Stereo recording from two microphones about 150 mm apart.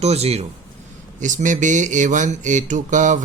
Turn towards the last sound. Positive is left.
turn(degrees=-55)  # may be behind; listen again after turning